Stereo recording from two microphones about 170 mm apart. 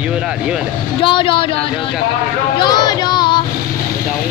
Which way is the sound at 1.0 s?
30° left (ahead or behind).